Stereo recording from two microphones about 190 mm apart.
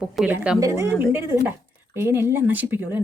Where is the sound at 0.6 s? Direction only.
15° right (ahead or behind).